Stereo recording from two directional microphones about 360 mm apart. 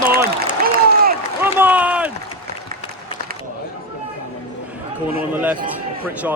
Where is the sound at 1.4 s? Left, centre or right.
Centre.